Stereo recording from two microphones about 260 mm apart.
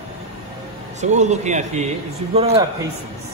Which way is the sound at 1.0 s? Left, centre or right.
Right.